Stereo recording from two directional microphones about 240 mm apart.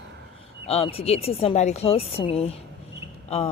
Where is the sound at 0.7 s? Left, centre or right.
Left.